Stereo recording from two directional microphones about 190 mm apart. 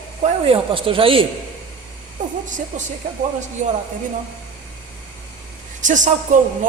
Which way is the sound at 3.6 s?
40° right (ahead or behind).